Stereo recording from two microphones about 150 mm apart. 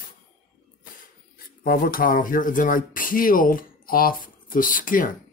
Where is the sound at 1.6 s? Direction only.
70° left (ahead or behind).